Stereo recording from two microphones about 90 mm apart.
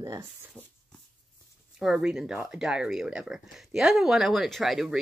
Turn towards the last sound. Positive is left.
turn(degrees=0)  # may be behind; listen again after turning